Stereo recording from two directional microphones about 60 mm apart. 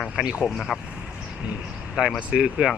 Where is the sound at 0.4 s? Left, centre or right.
Centre.